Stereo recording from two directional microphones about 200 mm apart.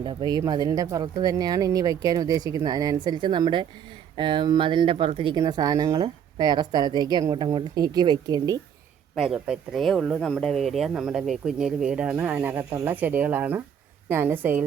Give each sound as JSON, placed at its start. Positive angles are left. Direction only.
{"t": 0.0, "sound": "speech", "side_deg": -20}
{"t": 9.1, "sound": "a woman's voice", "side_deg": 0}